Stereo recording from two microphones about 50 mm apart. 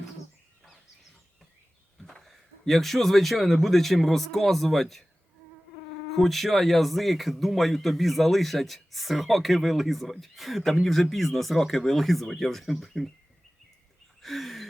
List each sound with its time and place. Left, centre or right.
2.0 s speech: centre
6.1 s speech: centre
14.2 s a sound: centre